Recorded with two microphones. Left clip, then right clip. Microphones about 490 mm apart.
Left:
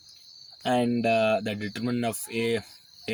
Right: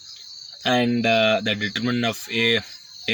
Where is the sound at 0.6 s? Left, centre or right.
Left.